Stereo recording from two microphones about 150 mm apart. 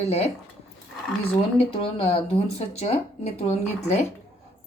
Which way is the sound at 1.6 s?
35° left (ahead or behind).